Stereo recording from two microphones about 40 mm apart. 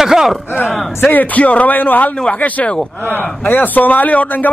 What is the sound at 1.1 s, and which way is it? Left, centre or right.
A man's voice, left.